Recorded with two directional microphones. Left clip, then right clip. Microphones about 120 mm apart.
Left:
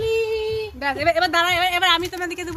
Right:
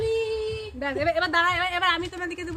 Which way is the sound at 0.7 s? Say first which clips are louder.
Left 5 dB; 20° right (ahead or behind).